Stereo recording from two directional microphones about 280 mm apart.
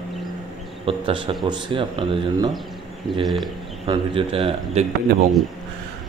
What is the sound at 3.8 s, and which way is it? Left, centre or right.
A man's voice, centre.